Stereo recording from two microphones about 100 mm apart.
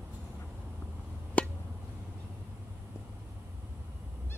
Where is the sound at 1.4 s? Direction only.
15° left (ahead or behind).